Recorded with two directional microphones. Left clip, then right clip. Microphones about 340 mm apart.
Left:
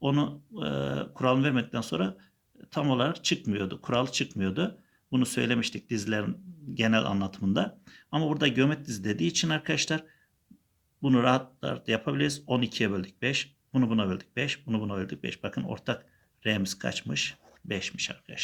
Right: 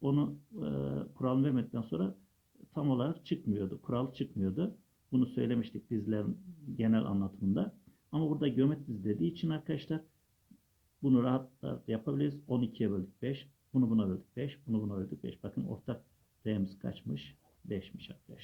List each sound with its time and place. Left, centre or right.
0.0 s speech: centre
11.0 s speech: centre